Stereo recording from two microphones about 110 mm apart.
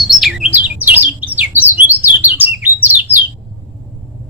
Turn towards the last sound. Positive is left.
turn(degrees=-15)  # may be behind; listen again after turning